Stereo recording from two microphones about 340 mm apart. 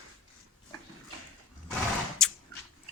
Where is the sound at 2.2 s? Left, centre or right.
Centre.